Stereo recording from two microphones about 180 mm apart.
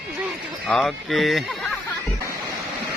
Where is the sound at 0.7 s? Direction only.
Centre (ahead or behind).